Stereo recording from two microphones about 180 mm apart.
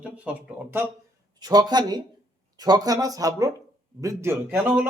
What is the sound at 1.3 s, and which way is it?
A man's voice, 20° right (ahead or behind).